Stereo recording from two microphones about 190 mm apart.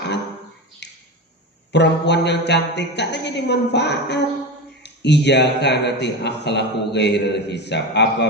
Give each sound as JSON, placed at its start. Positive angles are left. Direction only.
{"t": 0.8, "sound": "finger snapping", "side_deg": 65}
{"t": 1.7, "sound": "a man's voice", "side_deg": 65}